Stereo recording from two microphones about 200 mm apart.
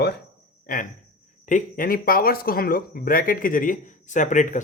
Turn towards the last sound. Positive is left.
turn(degrees=40)  # may be behind; listen again after turning